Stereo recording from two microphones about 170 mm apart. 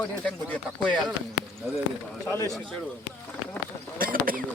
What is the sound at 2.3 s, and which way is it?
Speech, 15° left (ahead or behind).